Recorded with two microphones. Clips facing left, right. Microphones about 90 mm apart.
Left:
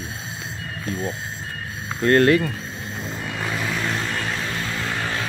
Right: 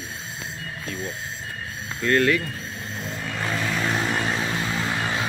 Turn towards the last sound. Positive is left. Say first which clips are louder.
# right 1 dB
turn(degrees=-15)  # may be behind; listen again after turning